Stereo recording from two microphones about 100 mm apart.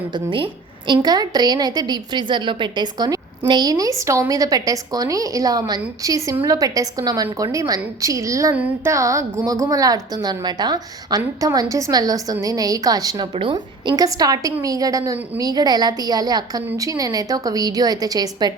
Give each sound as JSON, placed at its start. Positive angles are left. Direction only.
{"t": 0.1, "sound": "a woman's voice", "side_deg": -55}
{"t": 1.0, "sound": "a woman's voice", "side_deg": -40}